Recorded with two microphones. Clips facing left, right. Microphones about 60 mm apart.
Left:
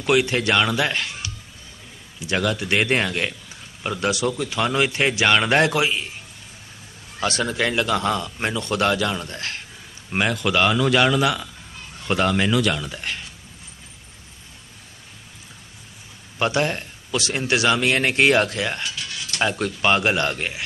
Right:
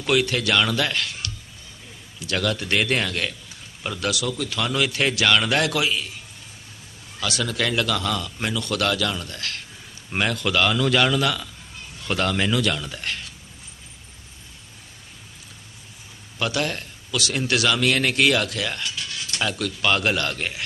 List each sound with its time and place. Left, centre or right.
0.0 s a man's voice: centre
2.7 s a man's voice: left
4.1 s speech: left
7.2 s speech: left
7.5 s speech: left
10.1 s a man's voice: centre
16.4 s a man's voice: left